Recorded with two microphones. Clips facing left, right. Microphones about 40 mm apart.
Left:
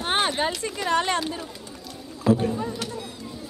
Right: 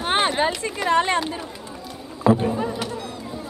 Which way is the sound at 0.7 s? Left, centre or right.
Right.